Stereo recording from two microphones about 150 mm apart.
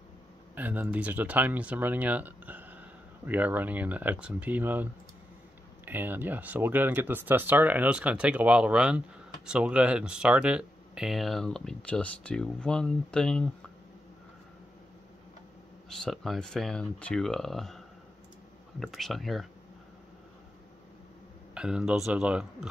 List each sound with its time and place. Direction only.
0.6 s speech: 10° right (ahead or behind)
5.9 s speech: 15° right (ahead or behind); by 13.5 s 5° left (ahead or behind)
16.0 s speech: centre (ahead or behind)
21.5 s speech: 5° right (ahead or behind)